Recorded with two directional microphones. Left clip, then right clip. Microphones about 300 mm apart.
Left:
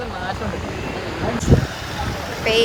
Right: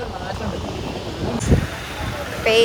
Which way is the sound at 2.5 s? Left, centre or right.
Centre.